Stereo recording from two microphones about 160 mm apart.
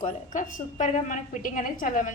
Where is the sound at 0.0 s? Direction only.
50° left (ahead or behind).